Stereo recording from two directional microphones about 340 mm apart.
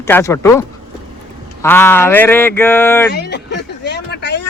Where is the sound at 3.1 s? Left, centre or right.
Left.